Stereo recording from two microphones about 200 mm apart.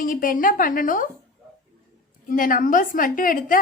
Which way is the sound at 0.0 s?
45° left (ahead or behind).